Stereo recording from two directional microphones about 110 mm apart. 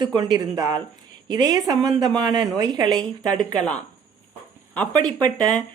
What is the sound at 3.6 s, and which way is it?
Speech, 10° left (ahead or behind).